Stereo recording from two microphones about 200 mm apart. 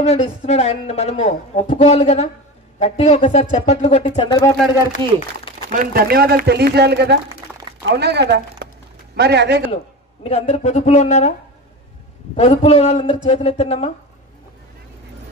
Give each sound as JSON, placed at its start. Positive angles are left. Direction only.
{"t": 0.0, "sound": "a woman's voice", "side_deg": 30}
{"t": 5.7, "sound": "speech", "side_deg": -45}
{"t": 10.2, "sound": "a woman's voice", "side_deg": 30}
{"t": 12.4, "sound": "a woman's voice", "side_deg": 30}